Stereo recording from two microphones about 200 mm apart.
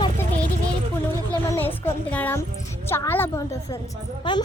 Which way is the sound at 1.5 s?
10° left (ahead or behind).